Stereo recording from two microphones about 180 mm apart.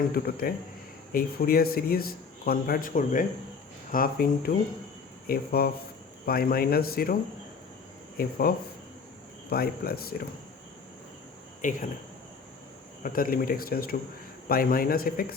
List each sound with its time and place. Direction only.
0.1 s a man's voice: 55° left (ahead or behind)
8.2 s a man's voice: 55° left (ahead or behind)
11.6 s a man's voice: 45° left (ahead or behind)
13.0 s a man's voice: 50° left (ahead or behind)